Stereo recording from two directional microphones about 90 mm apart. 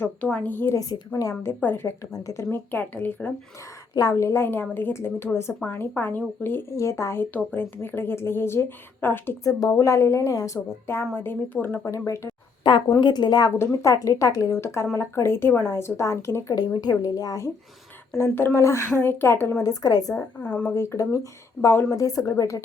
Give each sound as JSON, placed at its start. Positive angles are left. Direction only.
{"t": 0.0, "sound": "a woman's voice", "side_deg": 15}
{"t": 0.7, "sound": "a woman's voice", "side_deg": 45}
{"t": 1.5, "sound": "a woman's voice", "side_deg": 25}
{"t": 4.1, "sound": "a woman's voice", "side_deg": 30}
{"t": 9.4, "sound": "a woman's voice", "side_deg": 40}
{"t": 10.8, "sound": "a woman's voice", "side_deg": 25}
{"t": 11.9, "sound": "a woman's voice", "side_deg": 35}
{"t": 12.7, "sound": "speech", "side_deg": 60}
{"t": 13.6, "sound": "a woman's voice", "side_deg": 35}
{"t": 16.6, "sound": "speech", "side_deg": 50}
{"t": 18.2, "sound": "a woman's voice", "side_deg": 25}
{"t": 19.6, "sound": "speech", "side_deg": 45}
{"t": 20.4, "sound": "speech", "side_deg": 15}
{"t": 20.7, "sound": "a woman's voice", "side_deg": 35}